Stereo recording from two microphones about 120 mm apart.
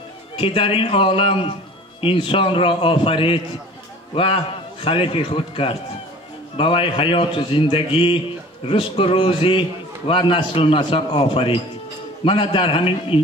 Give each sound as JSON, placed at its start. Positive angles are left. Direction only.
{"t": 0.4, "sound": "a man's voice", "side_deg": 45}